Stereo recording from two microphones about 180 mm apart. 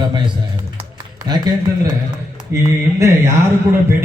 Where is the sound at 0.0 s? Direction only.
25° right (ahead or behind).